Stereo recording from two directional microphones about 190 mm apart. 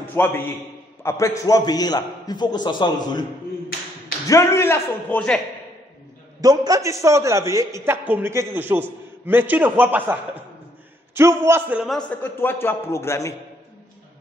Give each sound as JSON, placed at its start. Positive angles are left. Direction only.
{"t": 0.2, "sound": "a man's voice", "side_deg": 10}
{"t": 4.3, "sound": "a man's voice", "side_deg": 15}
{"t": 6.4, "sound": "a man's voice", "side_deg": -20}
{"t": 11.1, "sound": "a man's voice", "side_deg": -15}
{"t": 11.8, "sound": "a man's voice", "side_deg": 5}